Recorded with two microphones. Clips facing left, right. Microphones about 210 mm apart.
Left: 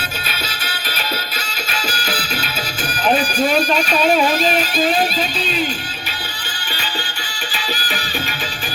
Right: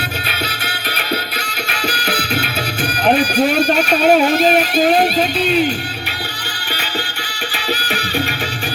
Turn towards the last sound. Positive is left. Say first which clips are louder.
# right 4 dB
turn(degrees=-65)  # may be behind; listen again after turning